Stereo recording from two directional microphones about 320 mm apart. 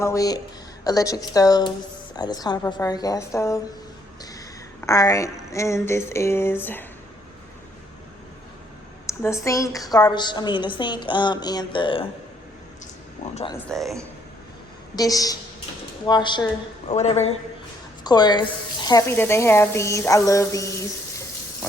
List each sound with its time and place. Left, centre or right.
0.0 s a woman's voice: centre
9.0 s a woman's voice: centre
13.3 s a woman's voice: centre
13.7 s a man's voice: centre
14.9 s a woman's voice: centre